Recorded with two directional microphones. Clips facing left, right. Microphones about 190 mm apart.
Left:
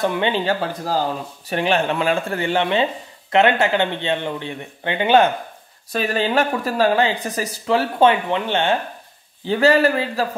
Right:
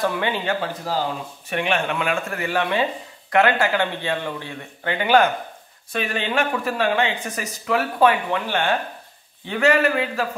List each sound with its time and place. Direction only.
0.0 s speech: 20° left (ahead or behind)
5.9 s speech: 35° left (ahead or behind)